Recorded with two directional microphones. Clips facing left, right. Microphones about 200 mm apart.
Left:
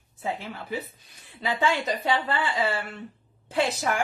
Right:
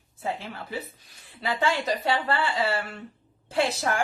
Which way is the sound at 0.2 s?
20° left (ahead or behind).